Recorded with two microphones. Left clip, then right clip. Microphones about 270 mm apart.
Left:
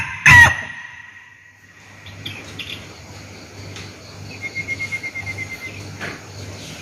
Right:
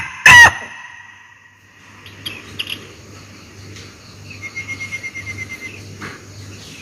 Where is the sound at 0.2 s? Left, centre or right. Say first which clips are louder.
Right 3 dB; centre.